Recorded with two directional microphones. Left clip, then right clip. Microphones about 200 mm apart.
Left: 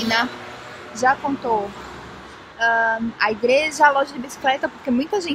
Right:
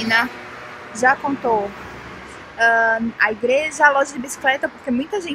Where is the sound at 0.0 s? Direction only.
Centre (ahead or behind).